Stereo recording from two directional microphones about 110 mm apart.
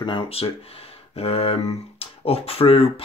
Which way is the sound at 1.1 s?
65° left (ahead or behind).